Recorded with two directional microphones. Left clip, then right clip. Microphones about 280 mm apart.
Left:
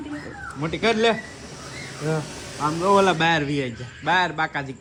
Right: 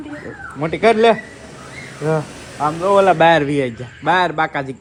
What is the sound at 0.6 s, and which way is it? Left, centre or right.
Speech, centre.